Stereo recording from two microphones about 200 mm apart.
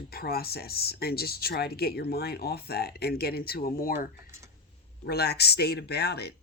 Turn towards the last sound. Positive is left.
turn(degrees=55)  # may be behind; listen again after turning